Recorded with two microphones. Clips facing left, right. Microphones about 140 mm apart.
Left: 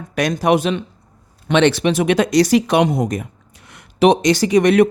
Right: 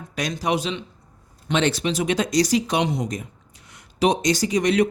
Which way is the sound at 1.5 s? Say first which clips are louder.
Left 7 dB; 70° left (ahead or behind).